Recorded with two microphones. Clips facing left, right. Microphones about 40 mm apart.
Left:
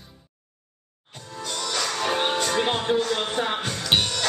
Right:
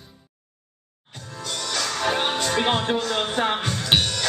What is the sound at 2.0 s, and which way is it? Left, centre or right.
Music, centre.